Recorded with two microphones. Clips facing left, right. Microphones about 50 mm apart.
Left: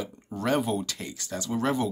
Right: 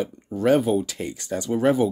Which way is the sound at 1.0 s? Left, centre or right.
Right.